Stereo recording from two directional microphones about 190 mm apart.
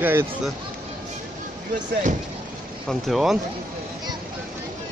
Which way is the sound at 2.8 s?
Centre (ahead or behind).